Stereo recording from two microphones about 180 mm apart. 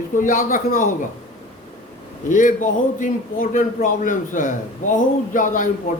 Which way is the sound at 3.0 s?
45° left (ahead or behind).